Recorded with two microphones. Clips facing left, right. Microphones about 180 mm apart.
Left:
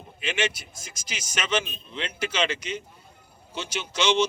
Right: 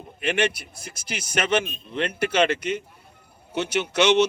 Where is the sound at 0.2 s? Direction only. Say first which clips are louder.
Right 5 dB; 60° right (ahead or behind).